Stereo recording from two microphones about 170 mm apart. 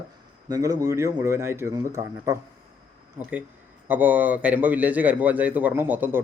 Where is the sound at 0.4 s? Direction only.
20° right (ahead or behind).